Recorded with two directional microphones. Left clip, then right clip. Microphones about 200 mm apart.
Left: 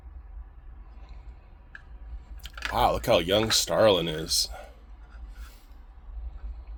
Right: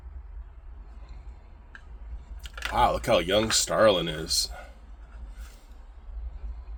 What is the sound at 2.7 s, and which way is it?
Speech, 30° left (ahead or behind).